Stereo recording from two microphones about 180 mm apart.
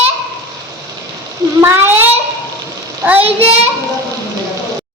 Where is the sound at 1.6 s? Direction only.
15° right (ahead or behind).